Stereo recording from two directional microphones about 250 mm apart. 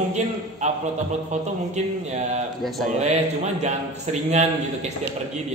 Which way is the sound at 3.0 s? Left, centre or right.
Right.